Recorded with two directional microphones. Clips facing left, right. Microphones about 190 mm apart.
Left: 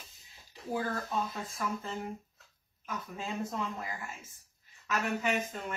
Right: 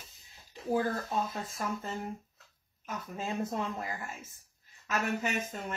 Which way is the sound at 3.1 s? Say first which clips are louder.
Right 3 dB; 45° right (ahead or behind).